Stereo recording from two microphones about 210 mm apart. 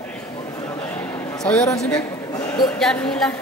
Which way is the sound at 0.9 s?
5° left (ahead or behind).